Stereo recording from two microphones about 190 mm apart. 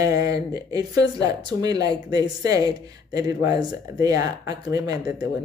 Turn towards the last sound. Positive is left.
turn(degrees=-20)  # may be behind; listen again after turning